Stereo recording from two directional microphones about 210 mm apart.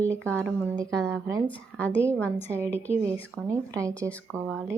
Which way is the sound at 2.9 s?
15° right (ahead or behind).